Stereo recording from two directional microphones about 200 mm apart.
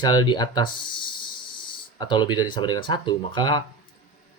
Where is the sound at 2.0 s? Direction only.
20° left (ahead or behind).